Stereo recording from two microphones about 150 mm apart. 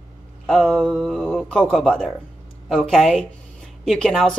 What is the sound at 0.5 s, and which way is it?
Speech, 5° left (ahead or behind).